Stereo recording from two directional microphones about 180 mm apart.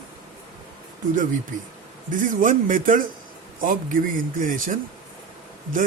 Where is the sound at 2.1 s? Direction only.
45° right (ahead or behind).